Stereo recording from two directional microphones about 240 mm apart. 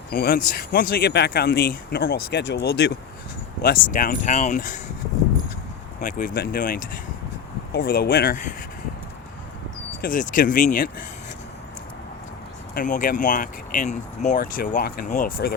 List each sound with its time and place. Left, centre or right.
0.1 s speech: left
6.0 s speech: left
10.0 s speech: left
12.7 s speech: left